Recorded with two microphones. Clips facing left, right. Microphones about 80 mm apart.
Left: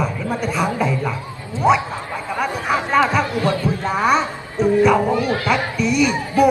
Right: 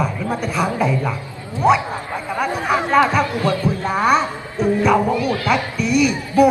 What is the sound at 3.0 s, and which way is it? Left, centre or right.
A woman's voice, centre.